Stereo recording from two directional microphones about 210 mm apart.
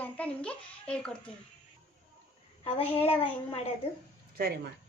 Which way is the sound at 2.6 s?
25° left (ahead or behind).